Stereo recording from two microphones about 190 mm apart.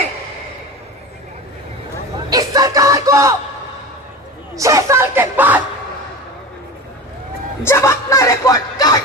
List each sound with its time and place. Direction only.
2.3 s music: 20° right (ahead or behind)
4.5 s speech: 15° right (ahead or behind)
7.6 s music: 15° left (ahead or behind)